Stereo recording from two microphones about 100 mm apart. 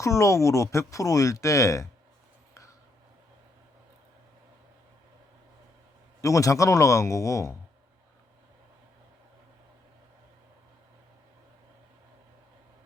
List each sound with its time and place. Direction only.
0.0 s speech: 30° left (ahead or behind)
6.2 s speech: 35° left (ahead or behind)